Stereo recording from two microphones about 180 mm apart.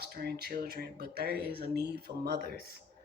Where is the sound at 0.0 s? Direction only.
65° right (ahead or behind).